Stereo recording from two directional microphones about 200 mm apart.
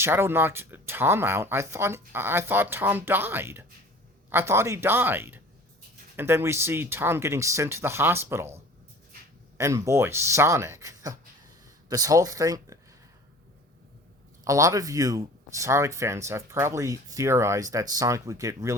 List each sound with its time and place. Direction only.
0.0 s speech: 10° right (ahead or behind)
9.6 s speech: 15° right (ahead or behind)
14.4 s speech: 15° right (ahead or behind)